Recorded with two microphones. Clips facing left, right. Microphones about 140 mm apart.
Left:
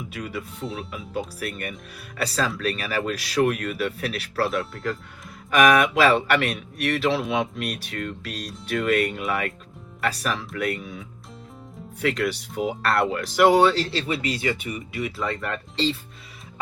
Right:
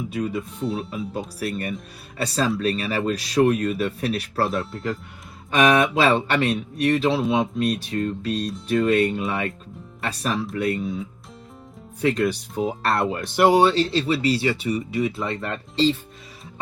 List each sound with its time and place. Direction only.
0.1 s speech: 35° right (ahead or behind)
12.0 s speech: 30° right (ahead or behind)
15.7 s speech: 40° right (ahead or behind)